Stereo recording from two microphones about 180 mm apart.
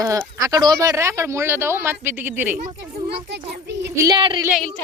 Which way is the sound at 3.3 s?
70° right (ahead or behind).